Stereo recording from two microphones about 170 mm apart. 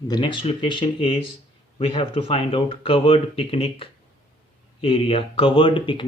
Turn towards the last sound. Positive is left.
turn(degrees=30)  # may be behind; listen again after turning